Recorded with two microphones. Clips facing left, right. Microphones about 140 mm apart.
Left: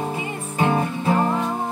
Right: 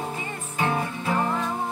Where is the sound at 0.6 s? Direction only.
25° left (ahead or behind).